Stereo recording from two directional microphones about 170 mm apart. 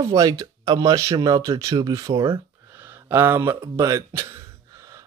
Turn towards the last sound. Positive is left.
turn(degrees=-15)  # may be behind; listen again after turning